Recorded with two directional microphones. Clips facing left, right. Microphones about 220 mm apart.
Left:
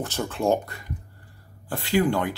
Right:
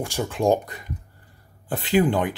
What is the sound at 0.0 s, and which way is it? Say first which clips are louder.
Speech: right 3 dB; 15° right (ahead or behind).